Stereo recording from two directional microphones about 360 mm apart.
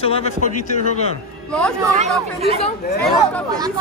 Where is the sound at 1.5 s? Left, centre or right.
Centre.